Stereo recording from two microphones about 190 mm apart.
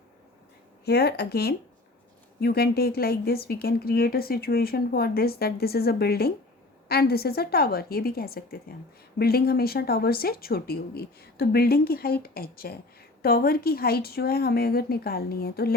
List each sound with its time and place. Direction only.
0.9 s speech: 60° left (ahead or behind)